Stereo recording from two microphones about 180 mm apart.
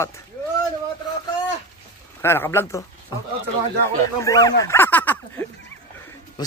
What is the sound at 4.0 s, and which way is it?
Speech, 15° left (ahead or behind).